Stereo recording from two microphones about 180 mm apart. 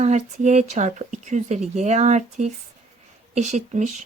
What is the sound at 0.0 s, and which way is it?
Speech, 40° right (ahead or behind).